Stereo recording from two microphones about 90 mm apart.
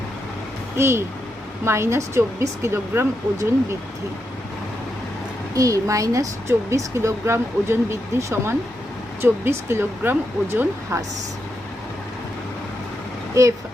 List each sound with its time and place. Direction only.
0.8 s speech: 30° right (ahead or behind)
5.5 s a woman's voice: 40° right (ahead or behind)
13.4 s a woman's voice: 40° right (ahead or behind)